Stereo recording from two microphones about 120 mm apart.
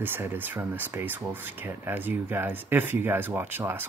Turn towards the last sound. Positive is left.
turn(degrees=-15)  # may be behind; listen again after turning